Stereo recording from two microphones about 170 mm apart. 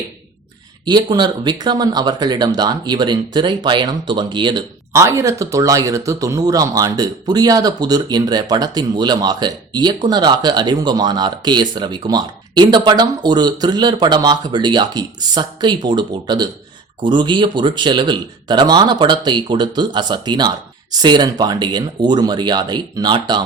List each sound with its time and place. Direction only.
0.9 s speech: 25° right (ahead or behind)